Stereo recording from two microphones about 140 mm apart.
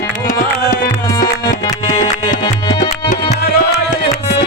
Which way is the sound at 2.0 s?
30° left (ahead or behind).